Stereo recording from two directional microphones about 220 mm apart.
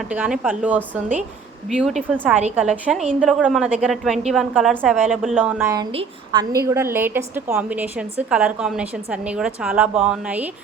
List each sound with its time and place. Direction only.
0.1 s a woman's voice: 5° right (ahead or behind)
5.9 s a woman's voice: 25° right (ahead or behind)
6.5 s a woman's voice: 15° right (ahead or behind)